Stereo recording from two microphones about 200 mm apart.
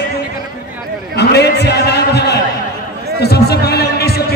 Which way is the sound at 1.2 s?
55° left (ahead or behind).